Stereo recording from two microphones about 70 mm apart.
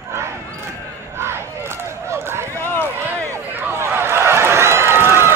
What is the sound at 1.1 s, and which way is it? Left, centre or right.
Crowd, right.